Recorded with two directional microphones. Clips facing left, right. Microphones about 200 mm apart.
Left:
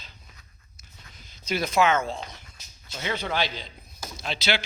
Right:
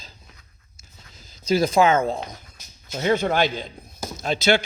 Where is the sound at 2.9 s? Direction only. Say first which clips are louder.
Right 9 dB; 45° right (ahead or behind).